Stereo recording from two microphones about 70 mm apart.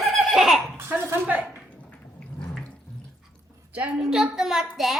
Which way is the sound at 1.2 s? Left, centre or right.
Centre.